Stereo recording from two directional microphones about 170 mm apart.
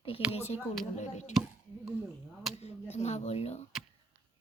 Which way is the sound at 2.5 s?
40° left (ahead or behind).